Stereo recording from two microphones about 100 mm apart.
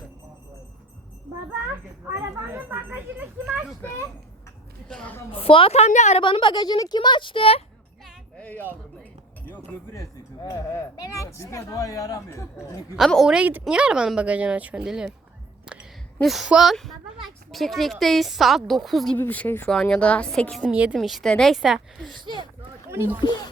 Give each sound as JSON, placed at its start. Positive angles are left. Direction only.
{"t": 2.5, "sound": "a woman's voice", "side_deg": -20}
{"t": 4.9, "sound": "speech", "side_deg": 5}
{"t": 5.3, "sound": "a woman's voice", "side_deg": 65}
{"t": 6.2, "sound": "speech", "side_deg": 55}
{"t": 8.4, "sound": "speech", "side_deg": 15}
{"t": 9.9, "sound": "speech", "side_deg": 35}
{"t": 13.0, "sound": "a woman's voice", "side_deg": 0}
{"t": 16.2, "sound": "a woman's voice", "side_deg": 0}
{"t": 19.1, "sound": "speech", "side_deg": 15}
{"t": 19.6, "sound": "speech", "side_deg": 5}
{"t": 20.7, "sound": "a woman's voice", "side_deg": -15}
{"t": 20.9, "sound": "a woman's voice", "side_deg": 0}
{"t": 22.2, "sound": "speech", "side_deg": -50}
{"t": 22.9, "sound": "speech", "side_deg": -25}